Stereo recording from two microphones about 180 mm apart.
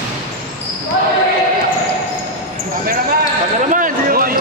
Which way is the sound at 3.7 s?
50° right (ahead or behind).